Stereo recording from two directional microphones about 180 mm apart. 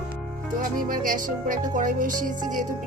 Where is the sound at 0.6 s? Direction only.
50° right (ahead or behind).